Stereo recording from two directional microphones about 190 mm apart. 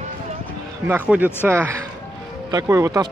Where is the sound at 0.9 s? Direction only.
10° right (ahead or behind).